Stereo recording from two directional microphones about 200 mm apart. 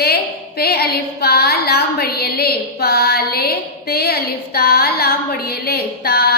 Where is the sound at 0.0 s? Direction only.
50° left (ahead or behind).